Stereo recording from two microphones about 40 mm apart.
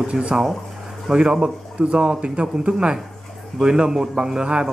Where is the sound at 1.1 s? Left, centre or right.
Right.